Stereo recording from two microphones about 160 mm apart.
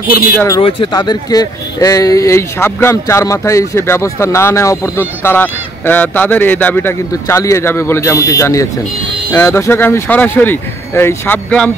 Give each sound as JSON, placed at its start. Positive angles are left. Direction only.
{"t": 0.6, "sound": "speech", "side_deg": 30}